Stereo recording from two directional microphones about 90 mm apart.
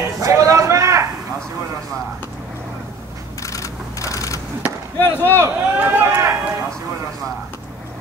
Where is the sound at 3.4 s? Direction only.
40° left (ahead or behind).